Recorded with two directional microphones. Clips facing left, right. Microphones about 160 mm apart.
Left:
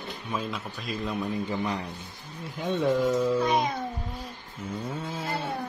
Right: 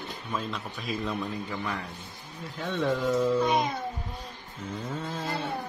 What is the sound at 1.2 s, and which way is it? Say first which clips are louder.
A man's voice: left 4 dB; 20° left (ahead or behind).